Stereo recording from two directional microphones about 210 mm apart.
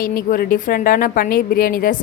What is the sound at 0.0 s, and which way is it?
A woman's voice, 45° left (ahead or behind).